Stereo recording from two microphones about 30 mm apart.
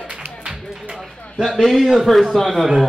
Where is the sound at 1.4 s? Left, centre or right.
Centre.